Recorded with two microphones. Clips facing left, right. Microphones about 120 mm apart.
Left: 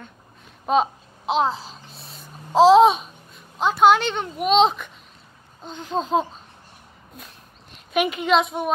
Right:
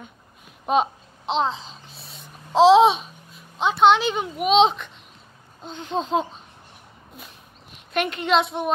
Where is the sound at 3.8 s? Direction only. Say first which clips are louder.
Even; centre (ahead or behind).